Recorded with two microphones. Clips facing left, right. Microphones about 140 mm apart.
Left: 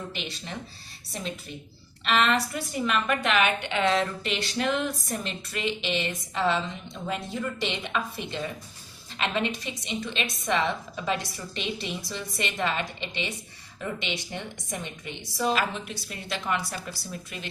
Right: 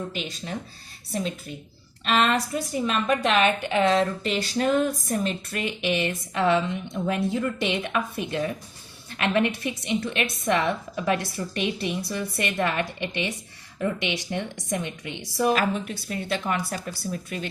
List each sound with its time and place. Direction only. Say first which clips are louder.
0.1 s speech: right 4 dB; 45° right (ahead or behind)
2.0 s a woman's voice: right 2 dB; 40° right (ahead or behind)